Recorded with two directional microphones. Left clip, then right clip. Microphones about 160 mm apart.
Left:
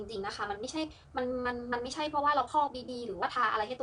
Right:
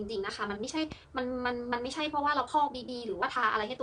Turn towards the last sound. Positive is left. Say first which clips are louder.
# right 1 dB
turn(degrees=-20)  # may be behind; listen again after turning